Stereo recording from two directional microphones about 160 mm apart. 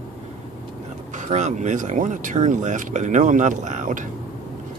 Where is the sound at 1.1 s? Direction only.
50° right (ahead or behind).